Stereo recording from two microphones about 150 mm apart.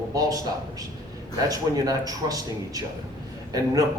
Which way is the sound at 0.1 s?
25° right (ahead or behind).